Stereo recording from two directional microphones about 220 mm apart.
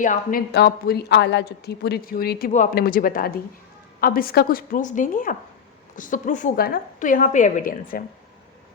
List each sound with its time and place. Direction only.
0.0 s a woman's voice: 35° left (ahead or behind)